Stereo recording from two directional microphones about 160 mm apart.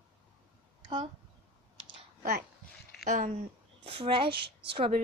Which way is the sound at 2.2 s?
70° right (ahead or behind).